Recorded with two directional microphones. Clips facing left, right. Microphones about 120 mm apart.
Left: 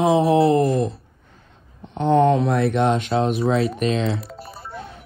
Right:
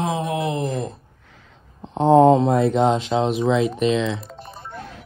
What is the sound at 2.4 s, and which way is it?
Mantra, 70° left (ahead or behind).